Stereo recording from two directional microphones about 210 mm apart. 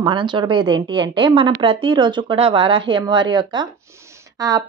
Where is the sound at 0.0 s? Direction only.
25° right (ahead or behind).